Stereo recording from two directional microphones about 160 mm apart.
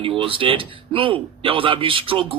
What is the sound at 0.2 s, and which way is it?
Speech, 35° right (ahead or behind).